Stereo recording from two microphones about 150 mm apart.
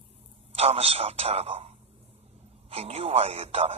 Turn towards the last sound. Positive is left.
turn(degrees=-40)  # may be behind; listen again after turning